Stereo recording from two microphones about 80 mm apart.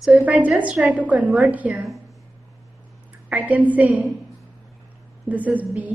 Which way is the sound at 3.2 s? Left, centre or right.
Centre.